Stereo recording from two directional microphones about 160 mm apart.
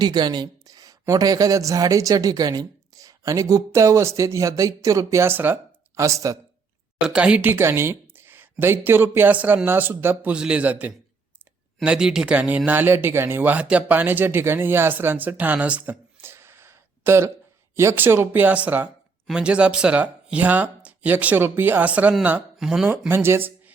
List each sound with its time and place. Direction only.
0.0 s a man's voice: 25° right (ahead or behind)
7.1 s speech: 5° right (ahead or behind)
22.9 s speech: 15° right (ahead or behind)